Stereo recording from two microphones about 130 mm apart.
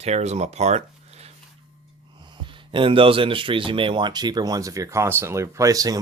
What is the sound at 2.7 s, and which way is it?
Speech, 40° right (ahead or behind).